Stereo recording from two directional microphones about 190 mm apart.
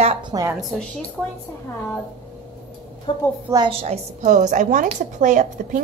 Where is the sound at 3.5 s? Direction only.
20° right (ahead or behind).